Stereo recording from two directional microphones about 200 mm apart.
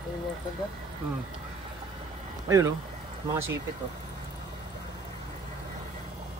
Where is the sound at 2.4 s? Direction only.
15° right (ahead or behind).